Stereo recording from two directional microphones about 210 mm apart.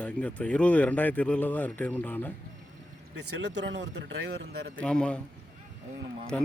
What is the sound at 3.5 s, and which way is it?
Speech, 55° right (ahead or behind).